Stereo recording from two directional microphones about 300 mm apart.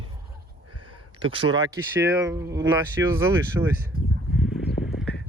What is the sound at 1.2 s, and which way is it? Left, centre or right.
Speech, centre.